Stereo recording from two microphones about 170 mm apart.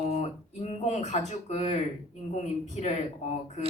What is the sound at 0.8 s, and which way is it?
A man's voice, 40° left (ahead or behind).